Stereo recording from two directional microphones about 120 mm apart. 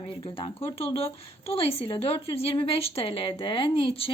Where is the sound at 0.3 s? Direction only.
50° left (ahead or behind).